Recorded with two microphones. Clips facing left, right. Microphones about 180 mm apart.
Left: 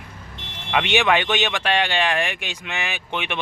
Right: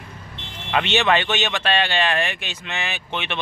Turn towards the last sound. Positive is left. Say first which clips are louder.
# left 1 dB
turn(degrees=15)  # may be behind; listen again after turning